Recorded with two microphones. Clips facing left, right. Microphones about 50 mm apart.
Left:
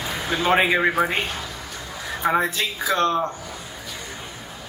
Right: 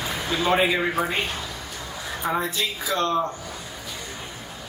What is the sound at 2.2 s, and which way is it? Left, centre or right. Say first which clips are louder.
Speech: left 4 dB; left.